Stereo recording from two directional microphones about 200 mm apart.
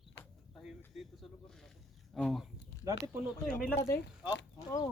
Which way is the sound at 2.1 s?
Centre (ahead or behind).